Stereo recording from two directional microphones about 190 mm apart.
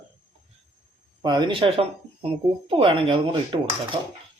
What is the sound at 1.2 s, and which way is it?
Speech, 25° right (ahead or behind).